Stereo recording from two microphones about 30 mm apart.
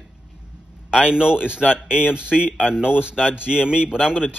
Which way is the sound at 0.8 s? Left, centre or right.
Right.